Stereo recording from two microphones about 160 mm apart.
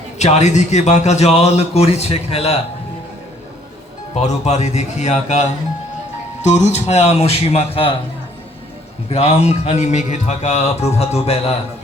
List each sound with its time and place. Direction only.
0.2 s speech: 45° left (ahead or behind)
4.1 s speech: 45° left (ahead or behind)
9.0 s speech: 40° left (ahead or behind)